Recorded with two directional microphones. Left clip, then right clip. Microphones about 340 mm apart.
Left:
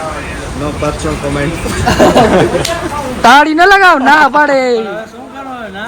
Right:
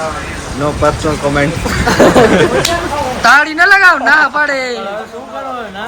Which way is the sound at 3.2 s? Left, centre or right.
Centre.